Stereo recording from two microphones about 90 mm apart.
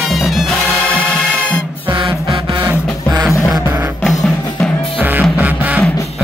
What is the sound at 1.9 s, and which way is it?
Music, 60° right (ahead or behind).